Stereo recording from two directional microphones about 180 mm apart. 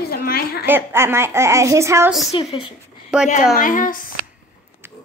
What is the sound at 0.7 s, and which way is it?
Speech, 15° right (ahead or behind).